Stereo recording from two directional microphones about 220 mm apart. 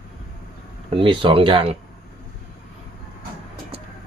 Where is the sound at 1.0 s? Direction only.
20° right (ahead or behind).